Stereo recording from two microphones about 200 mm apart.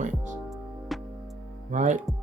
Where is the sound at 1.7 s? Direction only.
35° right (ahead or behind).